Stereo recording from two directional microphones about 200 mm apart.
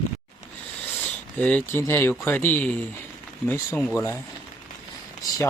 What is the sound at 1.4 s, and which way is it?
Speech, 10° left (ahead or behind).